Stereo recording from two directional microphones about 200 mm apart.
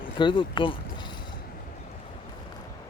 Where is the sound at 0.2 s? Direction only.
25° left (ahead or behind).